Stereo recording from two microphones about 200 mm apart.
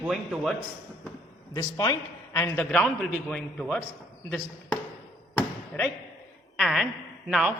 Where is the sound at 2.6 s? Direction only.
5° left (ahead or behind).